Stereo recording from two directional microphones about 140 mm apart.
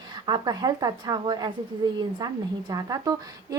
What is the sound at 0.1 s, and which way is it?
A woman's voice, 30° right (ahead or behind).